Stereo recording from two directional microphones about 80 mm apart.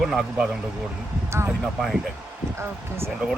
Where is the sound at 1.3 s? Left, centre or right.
Right.